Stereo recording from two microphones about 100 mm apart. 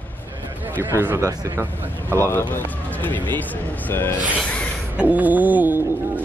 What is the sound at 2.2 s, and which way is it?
Speech, 20° left (ahead or behind).